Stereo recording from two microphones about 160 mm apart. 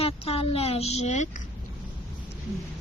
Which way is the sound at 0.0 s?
40° left (ahead or behind).